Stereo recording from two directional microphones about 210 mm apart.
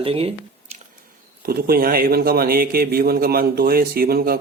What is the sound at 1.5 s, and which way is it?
A man's voice, 45° right (ahead or behind).